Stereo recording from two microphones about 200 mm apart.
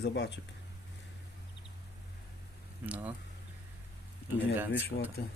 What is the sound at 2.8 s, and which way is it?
Speech, 5° right (ahead or behind).